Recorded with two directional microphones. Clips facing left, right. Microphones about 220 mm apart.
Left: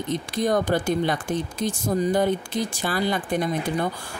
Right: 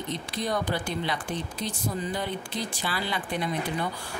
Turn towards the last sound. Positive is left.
turn(degrees=45)  # may be behind; listen again after turning